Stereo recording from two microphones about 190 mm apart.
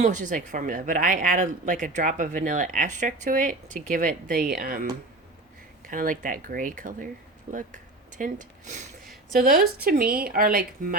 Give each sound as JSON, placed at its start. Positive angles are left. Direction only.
{"t": 0.0, "sound": "speech", "side_deg": -40}
{"t": 5.9, "sound": "speech", "side_deg": -45}